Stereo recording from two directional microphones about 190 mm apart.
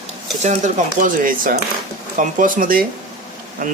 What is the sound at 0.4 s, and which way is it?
Speech, 40° right (ahead or behind).